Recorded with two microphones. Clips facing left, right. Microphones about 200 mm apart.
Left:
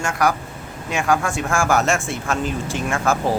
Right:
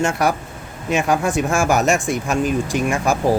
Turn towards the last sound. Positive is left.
turn(degrees=-15)  # may be behind; listen again after turning